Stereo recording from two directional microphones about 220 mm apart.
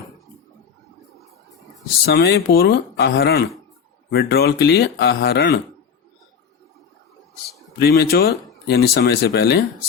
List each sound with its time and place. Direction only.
2.0 s speech: 50° left (ahead or behind)
7.8 s speech: 45° left (ahead or behind)